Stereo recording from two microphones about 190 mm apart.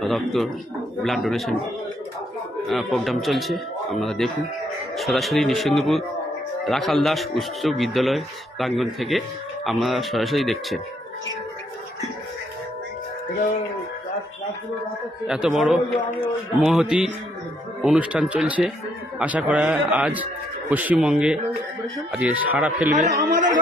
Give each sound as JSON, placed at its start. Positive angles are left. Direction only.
{"t": 0.0, "sound": "a man's voice", "side_deg": 0}
{"t": 2.6, "sound": "a man's voice", "side_deg": 0}
{"t": 15.2, "sound": "a man's voice", "side_deg": -5}
{"t": 16.6, "sound": "a man's voice", "side_deg": 0}
{"t": 22.8, "sound": "speech", "side_deg": -40}